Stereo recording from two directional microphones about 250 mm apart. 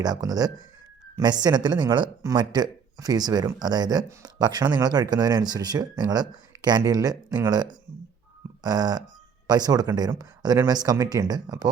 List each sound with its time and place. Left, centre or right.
0.0 s speech: centre